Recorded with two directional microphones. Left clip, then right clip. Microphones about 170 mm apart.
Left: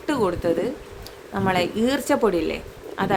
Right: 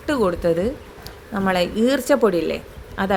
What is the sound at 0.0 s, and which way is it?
Speech, 15° right (ahead or behind).